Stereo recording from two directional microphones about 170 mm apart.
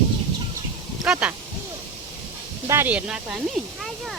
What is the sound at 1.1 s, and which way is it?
Speech, 5° right (ahead or behind).